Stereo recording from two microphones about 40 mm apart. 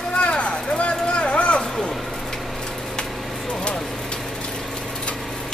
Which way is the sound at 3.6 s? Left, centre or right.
Left.